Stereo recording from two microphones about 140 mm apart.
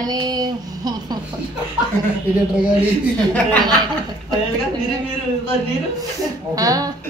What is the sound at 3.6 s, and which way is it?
Speech, 30° right (ahead or behind).